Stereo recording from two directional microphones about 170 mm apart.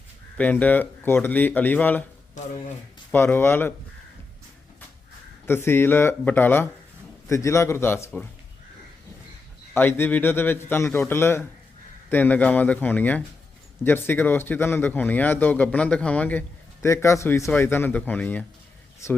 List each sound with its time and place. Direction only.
0.3 s a man's voice: 10° left (ahead or behind)
2.4 s speech: 50° left (ahead or behind)
3.1 s a man's voice: 10° left (ahead or behind)
5.5 s a man's voice: 15° left (ahead or behind)
9.7 s a man's voice: 10° left (ahead or behind)